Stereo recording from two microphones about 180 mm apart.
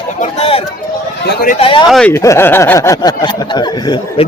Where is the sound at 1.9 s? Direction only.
10° left (ahead or behind).